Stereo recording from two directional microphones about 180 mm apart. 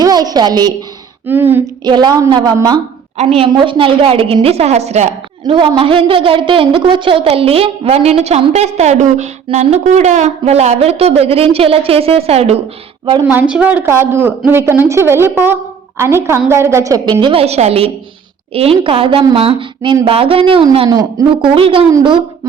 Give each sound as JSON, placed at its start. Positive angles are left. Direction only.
{"t": 0.0, "sound": "a woman's voice", "side_deg": -20}
{"t": 1.3, "sound": "speech", "side_deg": -10}
{"t": 1.8, "sound": "a woman's voice", "side_deg": -25}
{"t": 13.2, "sound": "a woman's voice", "side_deg": -10}
{"t": 21.5, "sound": "a woman's voice", "side_deg": -30}